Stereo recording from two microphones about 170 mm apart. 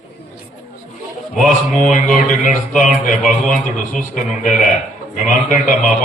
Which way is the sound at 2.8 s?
50° left (ahead or behind).